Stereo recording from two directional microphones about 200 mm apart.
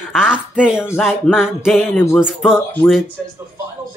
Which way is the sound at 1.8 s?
10° left (ahead or behind).